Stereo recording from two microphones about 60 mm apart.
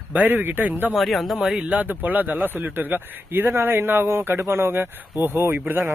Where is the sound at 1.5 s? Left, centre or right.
Centre.